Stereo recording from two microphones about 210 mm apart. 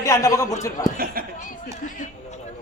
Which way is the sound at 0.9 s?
45° right (ahead or behind).